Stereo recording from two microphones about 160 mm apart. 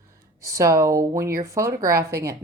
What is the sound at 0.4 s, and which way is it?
Speech, 20° right (ahead or behind).